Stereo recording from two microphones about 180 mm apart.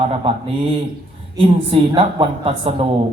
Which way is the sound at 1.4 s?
30° right (ahead or behind).